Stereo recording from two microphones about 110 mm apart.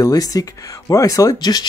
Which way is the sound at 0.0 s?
35° left (ahead or behind).